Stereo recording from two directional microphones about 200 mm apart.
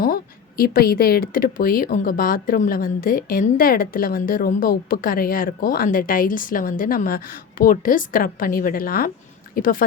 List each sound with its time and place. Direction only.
0.0 s speech: 45° left (ahead or behind)